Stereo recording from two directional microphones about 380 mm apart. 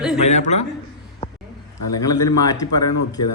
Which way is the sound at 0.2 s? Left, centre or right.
Centre.